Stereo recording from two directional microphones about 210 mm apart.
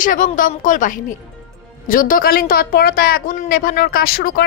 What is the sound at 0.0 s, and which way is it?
A woman's voice, 40° left (ahead or behind).